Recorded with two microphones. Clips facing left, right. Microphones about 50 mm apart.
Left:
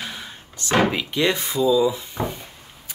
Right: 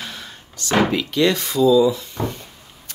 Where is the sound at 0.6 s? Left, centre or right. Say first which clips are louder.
Right 1 dB; centre.